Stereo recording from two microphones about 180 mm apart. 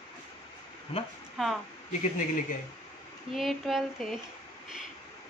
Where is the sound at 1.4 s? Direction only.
Centre (ahead or behind).